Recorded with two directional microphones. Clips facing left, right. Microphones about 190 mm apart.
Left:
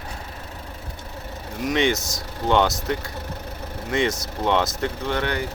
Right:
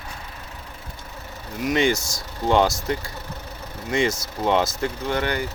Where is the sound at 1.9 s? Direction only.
20° left (ahead or behind).